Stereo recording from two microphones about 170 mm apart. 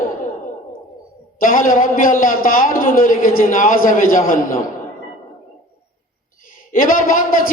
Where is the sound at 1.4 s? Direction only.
50° left (ahead or behind).